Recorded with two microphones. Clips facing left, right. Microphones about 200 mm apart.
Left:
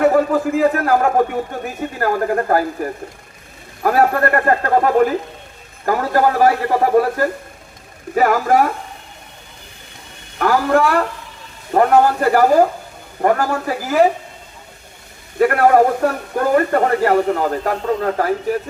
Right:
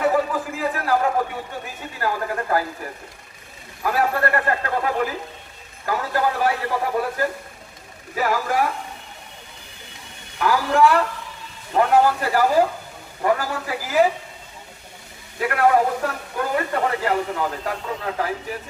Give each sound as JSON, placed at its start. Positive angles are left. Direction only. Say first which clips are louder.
{"t": 0.0, "sound": "a man's voice", "louder": "left 7 dB", "side_deg": 50}
{"t": 3.8, "sound": "a man's voice", "louder": "left 6 dB", "side_deg": 50}
{"t": 10.3, "sound": "a man's voice", "louder": "left 5 dB", "side_deg": 50}
{"t": 15.4, "sound": "a man's voice", "louder": "left 6 dB", "side_deg": 50}